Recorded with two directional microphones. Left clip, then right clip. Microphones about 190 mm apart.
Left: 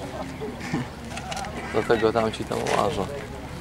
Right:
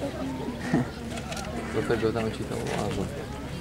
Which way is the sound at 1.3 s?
5° right (ahead or behind).